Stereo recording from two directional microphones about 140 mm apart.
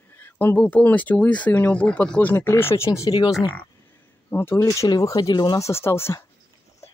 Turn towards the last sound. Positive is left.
turn(degrees=20)  # may be behind; listen again after turning